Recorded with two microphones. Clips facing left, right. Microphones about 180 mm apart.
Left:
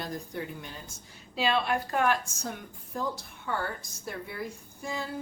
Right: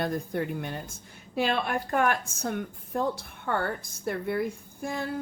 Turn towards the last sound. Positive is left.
turn(degrees=-55)  # may be behind; listen again after turning